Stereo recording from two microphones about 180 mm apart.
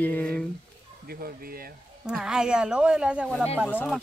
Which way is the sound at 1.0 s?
55° right (ahead or behind).